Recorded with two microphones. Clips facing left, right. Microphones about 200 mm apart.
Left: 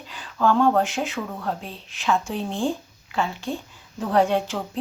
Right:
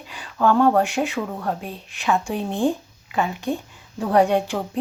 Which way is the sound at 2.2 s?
15° right (ahead or behind).